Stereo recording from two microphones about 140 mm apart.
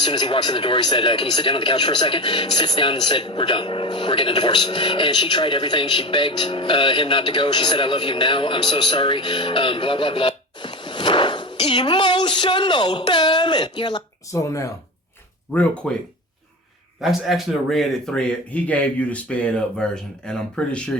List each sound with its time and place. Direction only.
0.0 s speech: 35° left (ahead or behind)
15.8 s speech: 5° left (ahead or behind)